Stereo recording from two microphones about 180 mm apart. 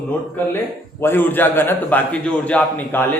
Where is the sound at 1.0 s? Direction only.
10° left (ahead or behind).